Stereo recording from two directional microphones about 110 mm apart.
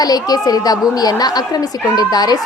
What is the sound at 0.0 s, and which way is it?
A woman's voice, 35° left (ahead or behind).